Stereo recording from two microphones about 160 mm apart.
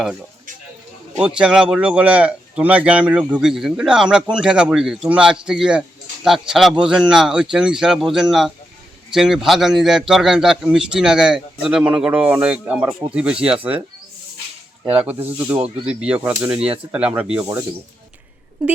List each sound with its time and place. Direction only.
1.2 s speech: 5° right (ahead or behind)
14.8 s speech: 10° right (ahead or behind)